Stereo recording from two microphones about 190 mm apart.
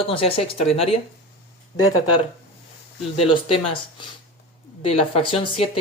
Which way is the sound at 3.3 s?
25° left (ahead or behind).